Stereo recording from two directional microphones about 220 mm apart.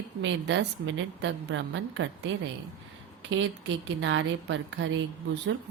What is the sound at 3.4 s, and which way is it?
A woman's voice, 55° right (ahead or behind).